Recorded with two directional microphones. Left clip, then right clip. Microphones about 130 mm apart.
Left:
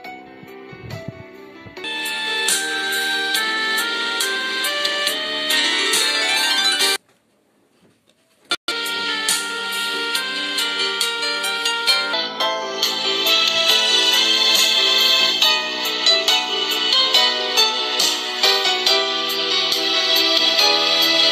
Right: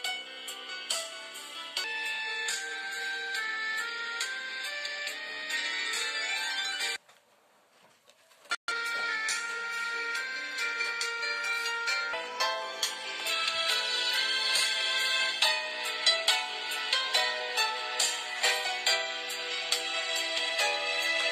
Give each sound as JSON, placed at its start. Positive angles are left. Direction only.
{"t": 2.0, "sound": "music", "side_deg": 90}
{"t": 8.5, "sound": "music", "side_deg": 60}